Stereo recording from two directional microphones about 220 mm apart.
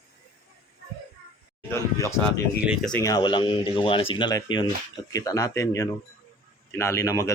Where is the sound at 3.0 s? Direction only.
20° left (ahead or behind).